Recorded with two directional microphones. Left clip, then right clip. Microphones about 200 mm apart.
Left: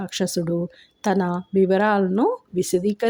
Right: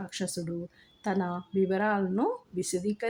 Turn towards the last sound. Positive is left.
turn(degrees=30)  # may be behind; listen again after turning